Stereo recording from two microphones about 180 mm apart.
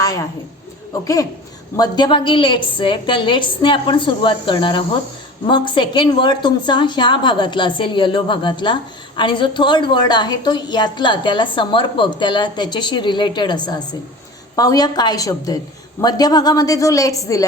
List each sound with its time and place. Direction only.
1.0 s a woman's voice: 20° left (ahead or behind)